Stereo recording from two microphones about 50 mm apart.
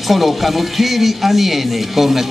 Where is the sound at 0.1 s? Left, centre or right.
Centre.